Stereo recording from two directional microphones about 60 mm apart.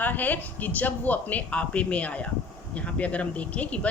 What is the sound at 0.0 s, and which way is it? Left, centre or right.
Speech, left.